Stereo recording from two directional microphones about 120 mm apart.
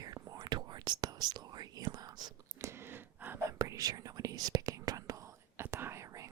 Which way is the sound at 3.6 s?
30° right (ahead or behind).